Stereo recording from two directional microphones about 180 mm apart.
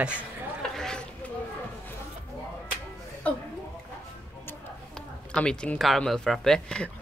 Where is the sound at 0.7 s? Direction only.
5° left (ahead or behind).